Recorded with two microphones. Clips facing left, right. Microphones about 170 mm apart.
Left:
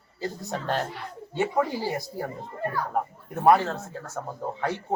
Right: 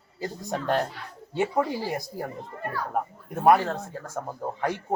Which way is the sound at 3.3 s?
10° right (ahead or behind).